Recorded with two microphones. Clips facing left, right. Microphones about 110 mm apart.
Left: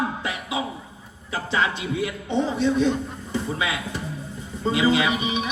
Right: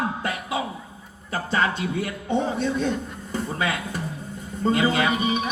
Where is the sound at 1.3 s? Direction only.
45° right (ahead or behind).